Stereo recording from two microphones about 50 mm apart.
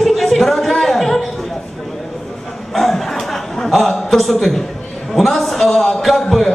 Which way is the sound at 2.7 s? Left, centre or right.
Centre.